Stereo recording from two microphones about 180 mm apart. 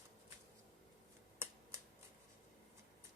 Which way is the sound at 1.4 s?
15° right (ahead or behind).